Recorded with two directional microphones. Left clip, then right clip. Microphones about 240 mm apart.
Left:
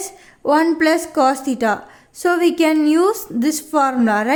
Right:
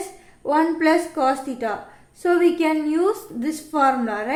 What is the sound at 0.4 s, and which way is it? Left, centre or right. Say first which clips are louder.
A woman's voice: left 4 dB; left.